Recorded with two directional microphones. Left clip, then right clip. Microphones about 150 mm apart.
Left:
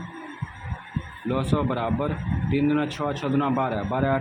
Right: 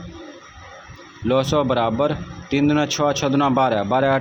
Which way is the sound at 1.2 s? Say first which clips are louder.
Right 8 dB; 40° right (ahead or behind).